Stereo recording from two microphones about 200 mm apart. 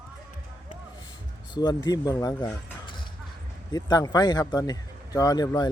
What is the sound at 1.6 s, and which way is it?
Speech, 20° left (ahead or behind).